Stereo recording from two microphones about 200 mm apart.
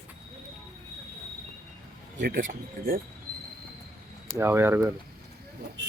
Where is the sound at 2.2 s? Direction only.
45° right (ahead or behind).